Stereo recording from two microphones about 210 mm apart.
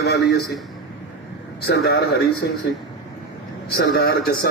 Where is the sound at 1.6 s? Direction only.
50° left (ahead or behind).